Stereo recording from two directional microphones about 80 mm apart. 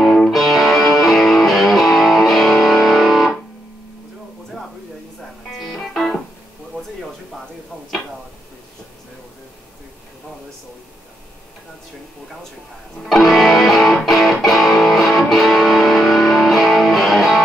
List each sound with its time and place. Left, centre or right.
0.0 s music: centre
5.5 s music: centre
13.0 s music: centre